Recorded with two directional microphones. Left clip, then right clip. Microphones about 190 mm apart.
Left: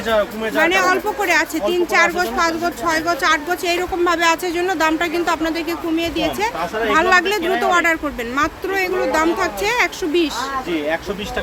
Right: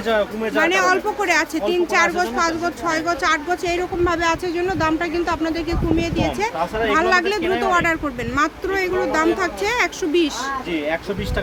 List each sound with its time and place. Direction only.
0.5 s speech: centre (ahead or behind)
6.6 s speech: 20° right (ahead or behind)
6.9 s speech: 5° left (ahead or behind)
10.7 s speech: 20° right (ahead or behind)